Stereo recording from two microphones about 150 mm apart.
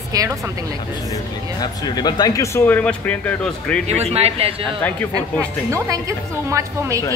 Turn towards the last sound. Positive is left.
turn(degrees=-20)  # may be behind; listen again after turning